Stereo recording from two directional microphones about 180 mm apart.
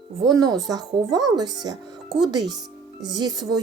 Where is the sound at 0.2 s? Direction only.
20° right (ahead or behind).